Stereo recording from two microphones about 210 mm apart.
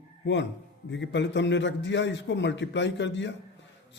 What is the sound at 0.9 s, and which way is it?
A man's voice, 55° left (ahead or behind).